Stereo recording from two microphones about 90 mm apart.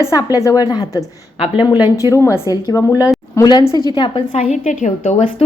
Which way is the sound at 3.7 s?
55° left (ahead or behind).